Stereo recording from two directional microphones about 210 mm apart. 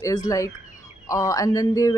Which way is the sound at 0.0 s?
15° left (ahead or behind).